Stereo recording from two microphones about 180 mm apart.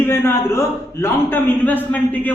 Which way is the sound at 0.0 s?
15° left (ahead or behind).